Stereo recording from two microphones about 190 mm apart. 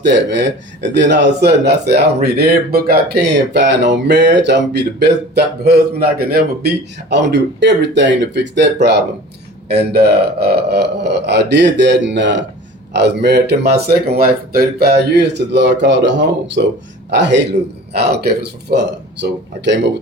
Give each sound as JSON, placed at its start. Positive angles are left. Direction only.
{"t": 0.0, "sound": "speech", "side_deg": -65}
{"t": 7.1, "sound": "speech", "side_deg": -65}
{"t": 16.6, "sound": "speech", "side_deg": -55}
{"t": 17.1, "sound": "speech", "side_deg": -65}